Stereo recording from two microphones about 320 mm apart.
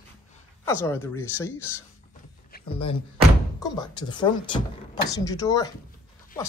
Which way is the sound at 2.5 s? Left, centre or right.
Left.